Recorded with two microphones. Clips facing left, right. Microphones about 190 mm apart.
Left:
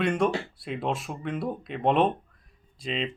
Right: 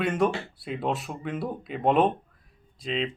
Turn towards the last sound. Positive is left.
turn(degrees=0)  # may be behind; listen again after turning